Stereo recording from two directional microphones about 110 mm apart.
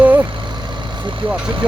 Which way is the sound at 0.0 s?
15° right (ahead or behind).